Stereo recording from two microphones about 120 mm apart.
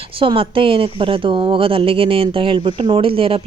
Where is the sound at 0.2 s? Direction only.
45° right (ahead or behind).